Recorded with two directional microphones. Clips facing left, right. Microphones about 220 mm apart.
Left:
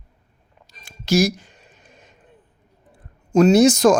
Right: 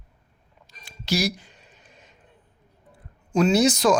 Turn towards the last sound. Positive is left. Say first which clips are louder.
# left 6 dB
turn(degrees=45)  # may be behind; listen again after turning